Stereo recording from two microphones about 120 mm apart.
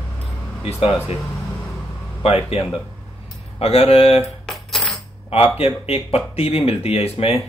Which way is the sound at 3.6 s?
55° left (ahead or behind).